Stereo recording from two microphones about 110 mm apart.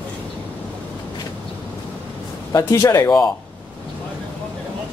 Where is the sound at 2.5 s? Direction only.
30° left (ahead or behind).